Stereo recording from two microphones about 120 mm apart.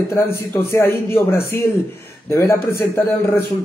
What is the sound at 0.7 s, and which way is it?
A man's voice, 20° left (ahead or behind).